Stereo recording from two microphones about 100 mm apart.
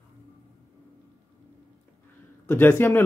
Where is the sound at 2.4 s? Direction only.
20° left (ahead or behind).